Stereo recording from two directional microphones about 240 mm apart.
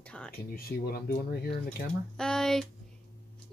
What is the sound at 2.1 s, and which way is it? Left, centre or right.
Speech, centre.